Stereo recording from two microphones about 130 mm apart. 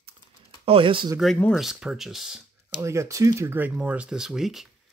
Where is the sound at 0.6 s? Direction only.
45° right (ahead or behind).